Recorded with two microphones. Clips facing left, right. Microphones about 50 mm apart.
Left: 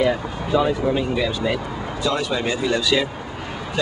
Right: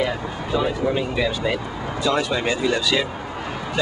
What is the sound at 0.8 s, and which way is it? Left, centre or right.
Speech, left.